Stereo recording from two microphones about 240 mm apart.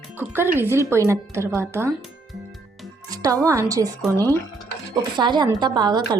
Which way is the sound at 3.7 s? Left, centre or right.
Centre.